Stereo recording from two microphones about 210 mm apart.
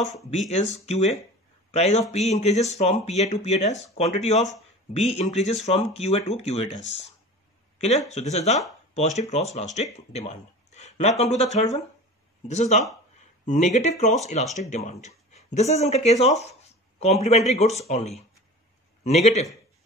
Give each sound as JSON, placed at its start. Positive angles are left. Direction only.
{"t": 0.3, "sound": "speech", "side_deg": 35}
{"t": 8.1, "sound": "speech", "side_deg": 30}